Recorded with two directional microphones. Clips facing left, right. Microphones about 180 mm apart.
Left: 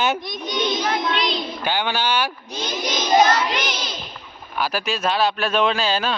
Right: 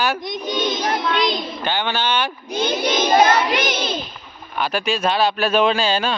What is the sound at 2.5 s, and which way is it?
Child singing, 55° right (ahead or behind).